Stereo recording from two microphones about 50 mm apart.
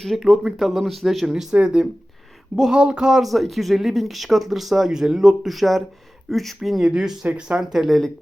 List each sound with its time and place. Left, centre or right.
0.0 s speech: centre
3.2 s speech: centre
7.3 s speech: right
7.6 s speech: centre